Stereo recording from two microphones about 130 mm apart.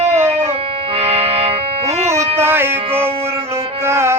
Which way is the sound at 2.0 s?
20° right (ahead or behind).